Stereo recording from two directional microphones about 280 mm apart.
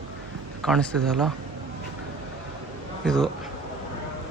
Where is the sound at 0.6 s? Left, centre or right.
Centre.